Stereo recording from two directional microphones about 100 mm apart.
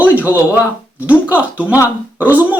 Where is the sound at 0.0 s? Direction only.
15° right (ahead or behind).